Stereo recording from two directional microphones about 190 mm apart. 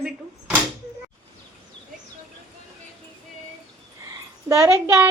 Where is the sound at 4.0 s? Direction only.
15° right (ahead or behind).